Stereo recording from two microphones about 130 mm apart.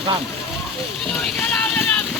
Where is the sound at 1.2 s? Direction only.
5° left (ahead or behind).